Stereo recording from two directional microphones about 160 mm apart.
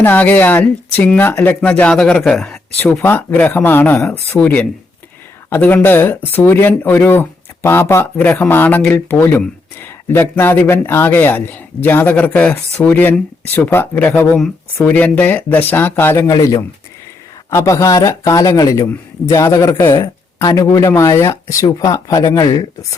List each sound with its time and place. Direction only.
0.0 s a man's voice: 10° left (ahead or behind)